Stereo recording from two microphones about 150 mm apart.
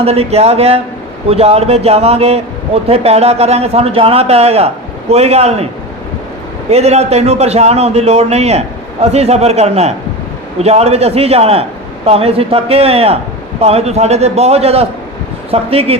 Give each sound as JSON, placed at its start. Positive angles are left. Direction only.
{"t": 0.0, "sound": "a man's voice", "side_deg": -40}
{"t": 6.7, "sound": "a man's voice", "side_deg": -45}